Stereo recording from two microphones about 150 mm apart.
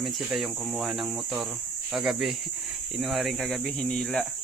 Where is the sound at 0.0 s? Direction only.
Centre (ahead or behind).